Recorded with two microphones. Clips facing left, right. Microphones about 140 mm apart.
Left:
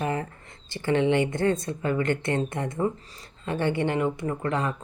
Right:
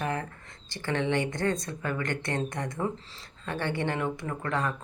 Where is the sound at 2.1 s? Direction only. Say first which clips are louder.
Left 5 dB; 55° left (ahead or behind).